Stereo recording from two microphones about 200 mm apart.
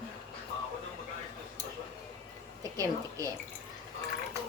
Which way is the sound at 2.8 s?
15° right (ahead or behind).